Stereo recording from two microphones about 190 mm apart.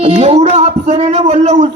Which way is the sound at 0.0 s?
35° right (ahead or behind).